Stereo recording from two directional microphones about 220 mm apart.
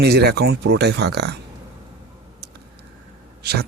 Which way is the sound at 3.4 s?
45° right (ahead or behind).